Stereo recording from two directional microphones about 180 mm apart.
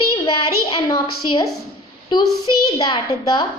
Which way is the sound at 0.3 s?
25° left (ahead or behind).